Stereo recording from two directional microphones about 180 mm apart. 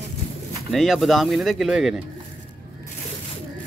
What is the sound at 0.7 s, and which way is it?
Speech, centre (ahead or behind).